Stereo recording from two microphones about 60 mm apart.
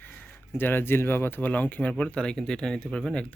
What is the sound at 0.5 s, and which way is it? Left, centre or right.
Speech, left.